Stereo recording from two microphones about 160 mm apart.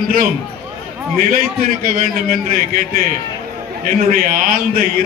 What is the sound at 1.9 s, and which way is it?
A man's voice, 60° right (ahead or behind).